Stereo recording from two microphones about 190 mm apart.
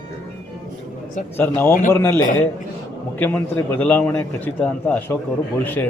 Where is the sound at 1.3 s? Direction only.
10° left (ahead or behind).